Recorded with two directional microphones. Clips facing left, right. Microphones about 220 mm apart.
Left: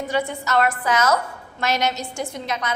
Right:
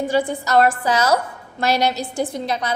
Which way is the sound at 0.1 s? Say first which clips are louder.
Right 3 dB; 30° right (ahead or behind).